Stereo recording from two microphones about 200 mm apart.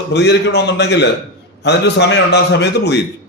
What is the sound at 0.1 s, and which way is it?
A man's voice, 60° left (ahead or behind).